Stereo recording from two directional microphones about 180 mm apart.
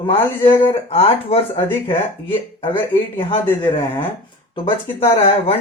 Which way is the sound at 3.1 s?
30° left (ahead or behind).